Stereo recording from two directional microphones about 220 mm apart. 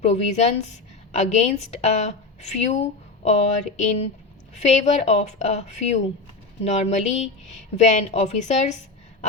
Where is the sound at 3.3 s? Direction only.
30° left (ahead or behind).